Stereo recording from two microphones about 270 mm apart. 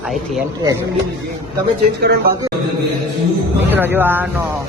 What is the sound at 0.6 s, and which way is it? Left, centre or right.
Speech, centre.